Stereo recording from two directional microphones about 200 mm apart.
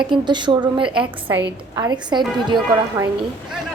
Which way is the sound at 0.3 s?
25° right (ahead or behind).